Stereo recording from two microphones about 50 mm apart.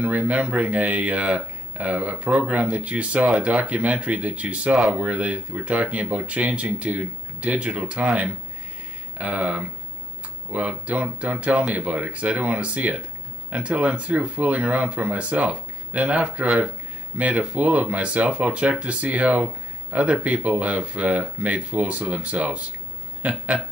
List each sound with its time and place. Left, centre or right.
0.0 s speech: right